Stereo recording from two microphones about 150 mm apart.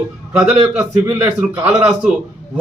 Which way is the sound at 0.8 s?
15° right (ahead or behind).